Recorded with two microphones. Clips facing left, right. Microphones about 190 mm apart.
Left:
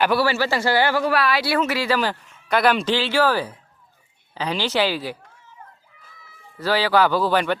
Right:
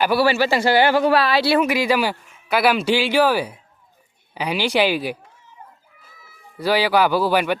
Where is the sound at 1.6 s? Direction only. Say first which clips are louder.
Right 3 dB; 15° right (ahead or behind).